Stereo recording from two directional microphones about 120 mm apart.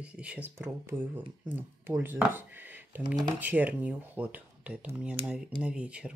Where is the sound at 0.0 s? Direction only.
10° right (ahead or behind).